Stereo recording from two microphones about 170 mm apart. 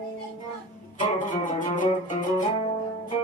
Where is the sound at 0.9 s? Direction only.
50° left (ahead or behind).